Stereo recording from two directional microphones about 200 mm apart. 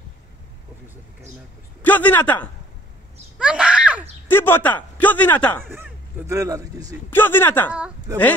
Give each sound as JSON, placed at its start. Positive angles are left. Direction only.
{"t": 1.8, "sound": "speech", "side_deg": 10}
{"t": 3.3, "sound": "speech", "side_deg": -5}
{"t": 4.3, "sound": "speech", "side_deg": 10}
{"t": 5.7, "sound": "speech", "side_deg": -10}
{"t": 7.1, "sound": "speech", "side_deg": 10}
{"t": 7.7, "sound": "speech", "side_deg": -5}